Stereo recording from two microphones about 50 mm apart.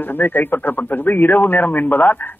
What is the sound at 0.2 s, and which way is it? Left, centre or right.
Speech, left.